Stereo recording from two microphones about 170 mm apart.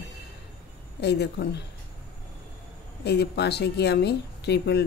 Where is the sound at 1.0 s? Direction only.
75° left (ahead or behind).